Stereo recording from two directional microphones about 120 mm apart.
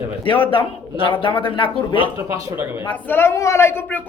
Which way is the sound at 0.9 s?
45° left (ahead or behind).